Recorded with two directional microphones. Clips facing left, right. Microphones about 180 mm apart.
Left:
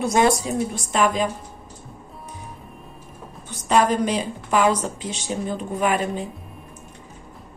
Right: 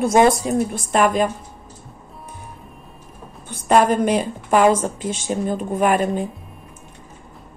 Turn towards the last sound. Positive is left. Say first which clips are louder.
# right 4 dB
turn(degrees=-50)  # may be behind; listen again after turning